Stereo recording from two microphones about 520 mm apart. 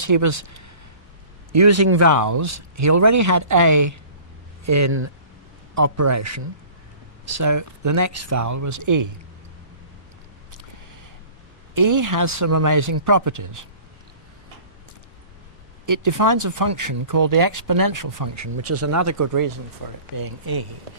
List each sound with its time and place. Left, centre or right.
0.0 s speech: right
11.7 s speech: right
15.8 s speech: right